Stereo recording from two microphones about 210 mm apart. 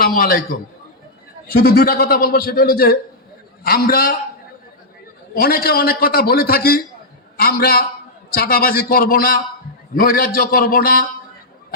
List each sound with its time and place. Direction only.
0.0 s a man's voice: 40° left (ahead or behind)
1.5 s a man's voice: 45° left (ahead or behind)
5.3 s a man's voice: 45° left (ahead or behind)